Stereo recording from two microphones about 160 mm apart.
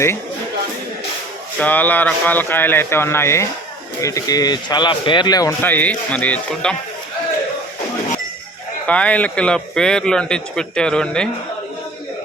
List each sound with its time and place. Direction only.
1.5 s speech: 10° left (ahead or behind)
5.6 s speech: 10° left (ahead or behind)
8.9 s a man's voice: 10° left (ahead or behind)